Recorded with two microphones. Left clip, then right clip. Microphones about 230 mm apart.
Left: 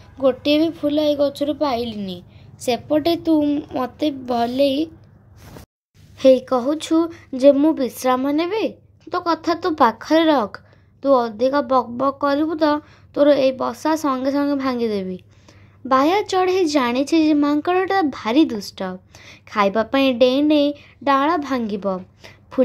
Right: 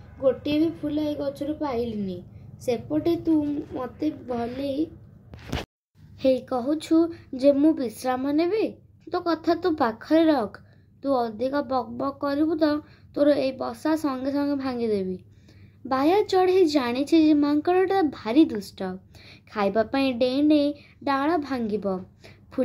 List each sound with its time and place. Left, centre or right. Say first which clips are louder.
0.2 s speech: left 6 dB; left
6.1 s speech: left 9 dB; left